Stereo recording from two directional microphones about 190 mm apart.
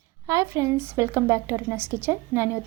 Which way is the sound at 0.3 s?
15° right (ahead or behind).